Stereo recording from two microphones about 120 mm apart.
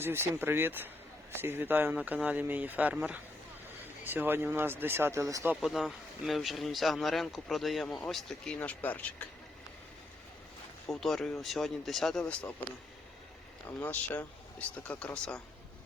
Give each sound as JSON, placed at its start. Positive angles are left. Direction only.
{"t": 0.0, "sound": "speech", "side_deg": -20}
{"t": 5.5, "sound": "speech", "side_deg": 0}
{"t": 10.8, "sound": "speech", "side_deg": 0}
{"t": 13.7, "sound": "speech", "side_deg": 15}